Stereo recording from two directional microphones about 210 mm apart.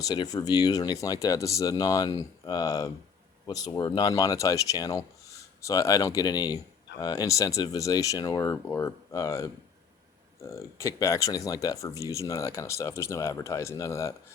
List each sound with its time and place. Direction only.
0.0 s speech: 20° left (ahead or behind)